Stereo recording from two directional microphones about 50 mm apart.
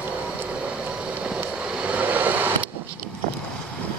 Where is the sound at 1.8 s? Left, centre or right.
Right.